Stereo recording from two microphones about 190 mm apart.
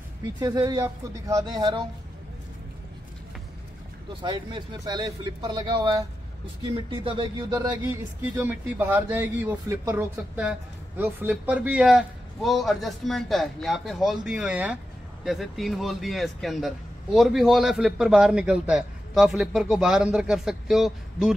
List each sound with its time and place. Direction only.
0.4 s speech: 20° right (ahead or behind)
4.1 s speech: 25° right (ahead or behind)
7.8 s speech: 10° right (ahead or behind)